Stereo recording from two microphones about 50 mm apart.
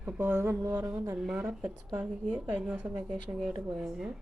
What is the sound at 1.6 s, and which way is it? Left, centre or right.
A woman's voice, right.